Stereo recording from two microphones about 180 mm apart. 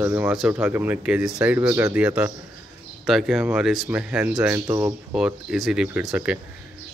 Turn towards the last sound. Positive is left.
turn(degrees=-5)  # may be behind; listen again after turning